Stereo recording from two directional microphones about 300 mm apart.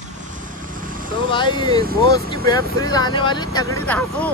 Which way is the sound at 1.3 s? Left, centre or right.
Centre.